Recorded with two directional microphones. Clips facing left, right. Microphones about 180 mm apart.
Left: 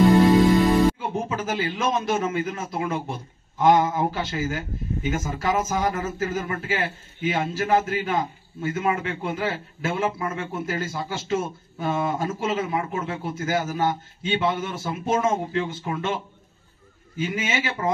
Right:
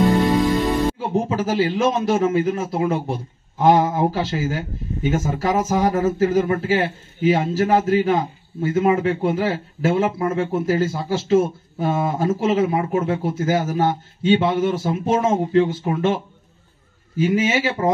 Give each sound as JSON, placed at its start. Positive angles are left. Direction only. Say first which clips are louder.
{"t": 0.1, "sound": "music", "louder": "left 2 dB", "side_deg": 0}
{"t": 1.3, "sound": "speech", "louder": "right 7 dB", "side_deg": -35}
{"t": 17.2, "sound": "speech", "louder": "right 8 dB", "side_deg": -35}